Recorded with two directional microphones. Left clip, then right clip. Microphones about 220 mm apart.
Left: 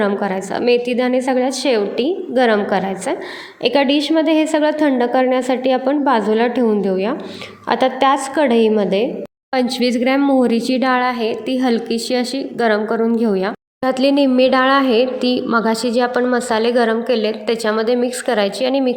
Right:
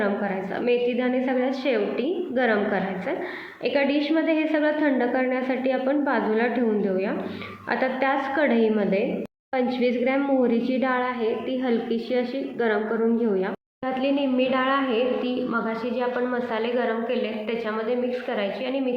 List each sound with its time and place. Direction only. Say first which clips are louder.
0.0 s a woman's voice: left 7 dB; 50° left (ahead or behind)
9.5 s speech: left 6 dB; 55° left (ahead or behind)